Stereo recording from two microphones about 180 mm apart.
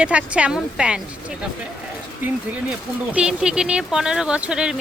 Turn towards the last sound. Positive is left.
turn(degrees=-5)  # may be behind; listen again after turning